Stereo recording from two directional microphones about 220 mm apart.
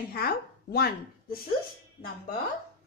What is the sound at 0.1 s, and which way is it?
Speech, 45° left (ahead or behind).